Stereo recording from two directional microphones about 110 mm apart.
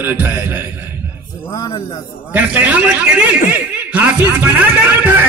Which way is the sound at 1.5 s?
30° left (ahead or behind).